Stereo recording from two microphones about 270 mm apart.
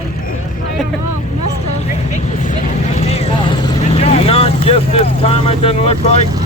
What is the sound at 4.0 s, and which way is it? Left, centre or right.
Speech, left.